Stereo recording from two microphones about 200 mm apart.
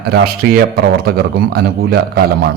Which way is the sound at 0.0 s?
50° right (ahead or behind).